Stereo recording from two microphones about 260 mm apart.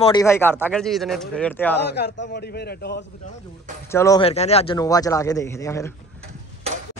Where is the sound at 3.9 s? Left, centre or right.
Centre.